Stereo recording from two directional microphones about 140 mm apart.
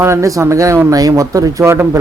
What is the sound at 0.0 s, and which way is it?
Speech, 20° right (ahead or behind).